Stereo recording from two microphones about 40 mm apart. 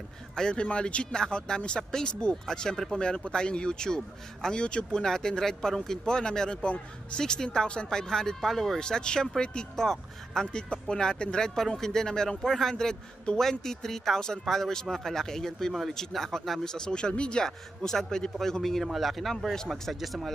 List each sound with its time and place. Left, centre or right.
0.4 s speech: left
8.7 s speech: centre
9.8 s speech: centre
17.4 s speech: centre
19.5 s speech: centre
19.9 s speech: centre